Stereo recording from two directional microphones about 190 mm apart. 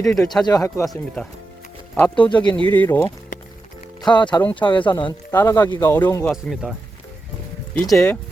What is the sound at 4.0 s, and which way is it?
Speech, 25° left (ahead or behind).